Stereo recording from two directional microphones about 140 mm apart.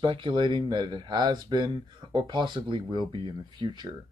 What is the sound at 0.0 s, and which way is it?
Speech, 35° right (ahead or behind).